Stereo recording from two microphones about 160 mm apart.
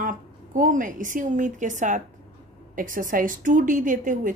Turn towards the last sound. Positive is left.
turn(degrees=-55)  # may be behind; listen again after turning